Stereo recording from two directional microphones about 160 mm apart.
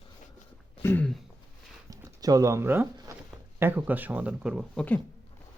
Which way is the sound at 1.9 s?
20° right (ahead or behind).